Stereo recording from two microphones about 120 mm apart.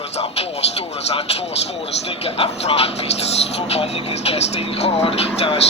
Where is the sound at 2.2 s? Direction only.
55° left (ahead or behind).